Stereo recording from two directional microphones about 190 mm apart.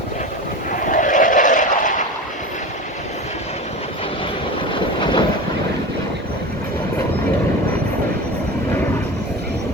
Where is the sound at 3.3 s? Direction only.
35° left (ahead or behind).